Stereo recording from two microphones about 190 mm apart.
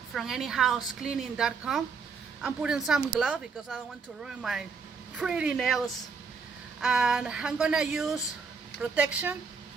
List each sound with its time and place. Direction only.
0.1 s a woman's voice: centre (ahead or behind)
6.8 s a woman's voice: 5° right (ahead or behind)